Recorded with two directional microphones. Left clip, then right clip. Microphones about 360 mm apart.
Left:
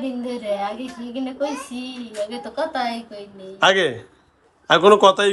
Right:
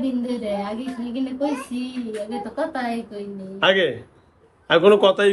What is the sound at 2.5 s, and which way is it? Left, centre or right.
A man's voice, left.